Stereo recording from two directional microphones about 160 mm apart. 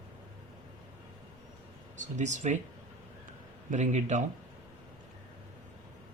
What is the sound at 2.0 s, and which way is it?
Speech, 50° right (ahead or behind).